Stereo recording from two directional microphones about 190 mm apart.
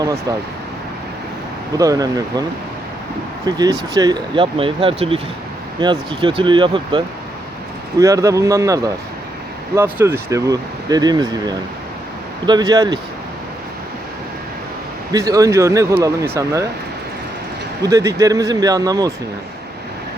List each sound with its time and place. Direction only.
0.0 s speech: 20° right (ahead or behind)
1.8 s speech: 20° right (ahead or behind)
3.4 s speech: 20° right (ahead or behind)
15.1 s speech: 20° right (ahead or behind)
17.8 s speech: 15° right (ahead or behind)